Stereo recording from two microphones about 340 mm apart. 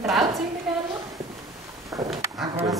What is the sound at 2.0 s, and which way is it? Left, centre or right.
Speech, centre.